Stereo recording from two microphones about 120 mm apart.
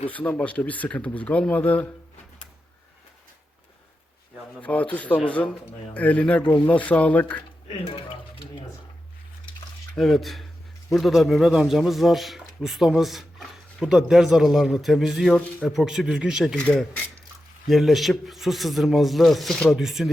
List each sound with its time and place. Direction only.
0.1 s speech: 10° left (ahead or behind)
4.6 s speech: 10° left (ahead or behind)
7.9 s music: 50° left (ahead or behind)
9.9 s speech: centre (ahead or behind)
17.7 s speech: centre (ahead or behind)